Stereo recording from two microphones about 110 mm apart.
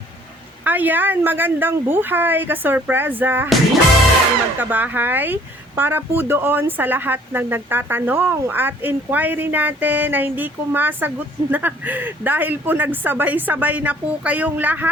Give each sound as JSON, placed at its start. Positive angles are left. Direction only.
{"t": 0.6, "sound": "speech", "side_deg": -15}
{"t": 4.5, "sound": "speech", "side_deg": -15}